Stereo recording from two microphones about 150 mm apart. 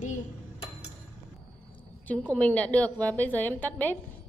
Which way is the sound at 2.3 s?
10° left (ahead or behind).